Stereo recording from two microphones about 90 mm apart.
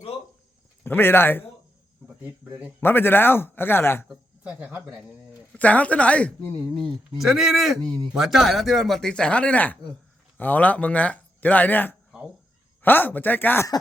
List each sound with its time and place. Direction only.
0.9 s a man's voice: 25° left (ahead or behind)
2.2 s speech: 20° right (ahead or behind)
2.8 s a man's voice: 25° left (ahead or behind)
4.1 s speech: 15° right (ahead or behind)
5.5 s speech: 15° left (ahead or behind)
7.2 s speech: 5° right (ahead or behind)
7.9 s speech: 50° right (ahead or behind)
8.1 s a man's voice: centre (ahead or behind); by 13.7 s 20° left (ahead or behind)